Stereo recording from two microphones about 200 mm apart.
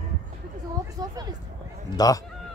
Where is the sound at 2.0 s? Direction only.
20° left (ahead or behind).